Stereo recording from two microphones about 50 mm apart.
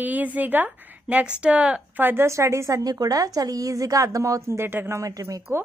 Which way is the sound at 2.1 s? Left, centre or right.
Right.